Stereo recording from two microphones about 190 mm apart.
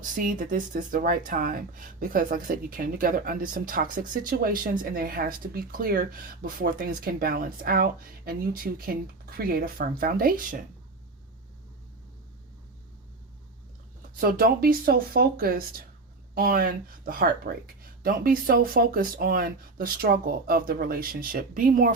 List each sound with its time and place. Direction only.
0.0 s speech: 45° right (ahead or behind)
14.2 s speech: 50° right (ahead or behind)